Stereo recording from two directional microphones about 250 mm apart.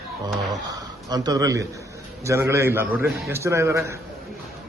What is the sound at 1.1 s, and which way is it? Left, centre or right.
A man's voice, centre.